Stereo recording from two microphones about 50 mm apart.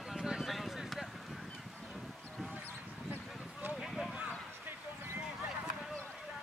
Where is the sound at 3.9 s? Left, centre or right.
Centre.